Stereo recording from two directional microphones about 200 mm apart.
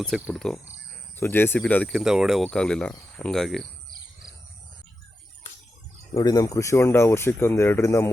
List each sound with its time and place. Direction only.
0.0 s speech: centre (ahead or behind)
6.1 s speech: 20° left (ahead or behind)